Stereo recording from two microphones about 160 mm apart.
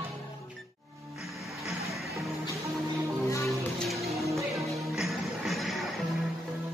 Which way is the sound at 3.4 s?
Centre (ahead or behind).